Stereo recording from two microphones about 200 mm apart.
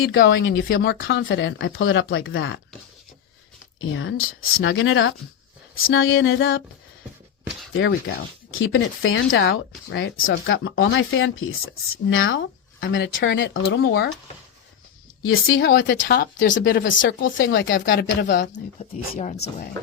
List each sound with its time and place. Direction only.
0.1 s speech: 70° left (ahead or behind)
3.8 s speech: 80° left
5.8 s a sound: 80° left
7.7 s speech: 75° left (ahead or behind); by 14.1 s 55° left (ahead or behind)
15.2 s a sound: 85° left
15.8 s speech: 65° left (ahead or behind)
16.1 s speech: 55° left (ahead or behind)
17.8 s speech: 65° left (ahead or behind)
18.8 s speech: 35° left (ahead or behind)